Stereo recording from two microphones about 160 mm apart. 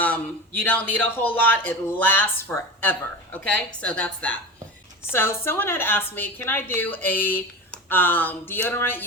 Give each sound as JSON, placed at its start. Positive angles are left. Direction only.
{"t": 0.0, "sound": "a woman's voice", "side_deg": 10}